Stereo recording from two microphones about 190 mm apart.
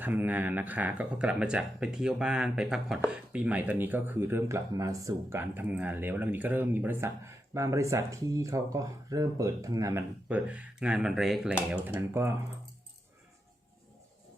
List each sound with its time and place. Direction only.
0.0 s speech: 10° right (ahead or behind)